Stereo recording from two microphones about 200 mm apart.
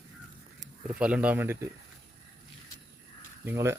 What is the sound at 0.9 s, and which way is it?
Speech, 5° right (ahead or behind).